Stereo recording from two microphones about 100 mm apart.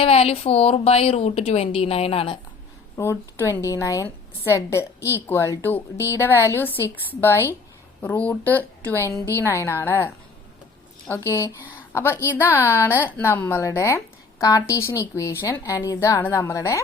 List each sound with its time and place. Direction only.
0.0 s a woman's voice: 85° left; by 2.4 s 70° left (ahead or behind)
3.0 s a woman's voice: 25° left (ahead or behind)
9.0 s a woman's voice: 30° left (ahead or behind)
11.1 s a woman's voice: 30° left (ahead or behind)